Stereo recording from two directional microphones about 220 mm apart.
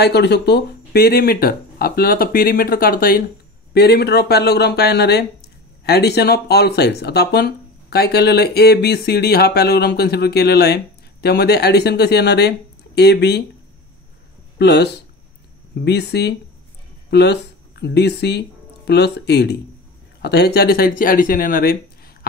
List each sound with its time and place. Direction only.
0.0 s speech: 50° left (ahead or behind)
14.6 s speech: 50° left (ahead or behind)